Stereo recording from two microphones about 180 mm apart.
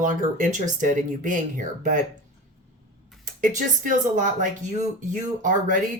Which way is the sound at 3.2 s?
45° right (ahead or behind).